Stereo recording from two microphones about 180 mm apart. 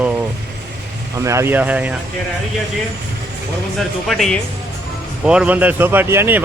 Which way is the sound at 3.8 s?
Centre (ahead or behind).